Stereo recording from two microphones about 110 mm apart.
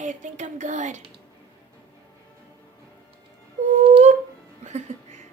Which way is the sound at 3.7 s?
90° right.